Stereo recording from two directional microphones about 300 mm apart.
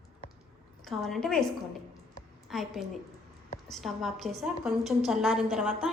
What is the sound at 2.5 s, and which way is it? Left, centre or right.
A woman's voice, centre.